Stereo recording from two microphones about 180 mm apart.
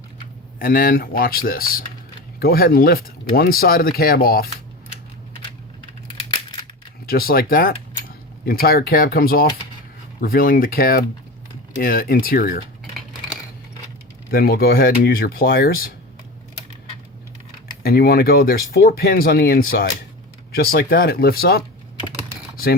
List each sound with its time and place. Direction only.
0.6 s speech: 55° left (ahead or behind)
7.1 s speech: 55° left (ahead or behind)
14.3 s speech: 60° left (ahead or behind)
17.8 s speech: 60° left (ahead or behind)